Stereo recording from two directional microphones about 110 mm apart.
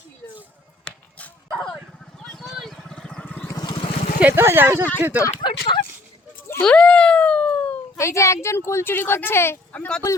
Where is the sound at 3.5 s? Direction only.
35° left (ahead or behind).